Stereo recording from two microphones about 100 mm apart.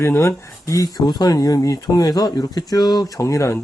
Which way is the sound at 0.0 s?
30° left (ahead or behind).